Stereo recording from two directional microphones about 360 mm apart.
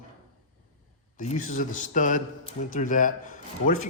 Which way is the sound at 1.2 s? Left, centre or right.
Left.